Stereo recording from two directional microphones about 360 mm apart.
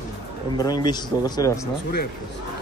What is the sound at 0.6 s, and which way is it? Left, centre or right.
Speech, centre.